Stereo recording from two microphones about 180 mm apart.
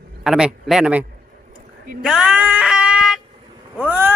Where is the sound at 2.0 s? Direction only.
5° right (ahead or behind).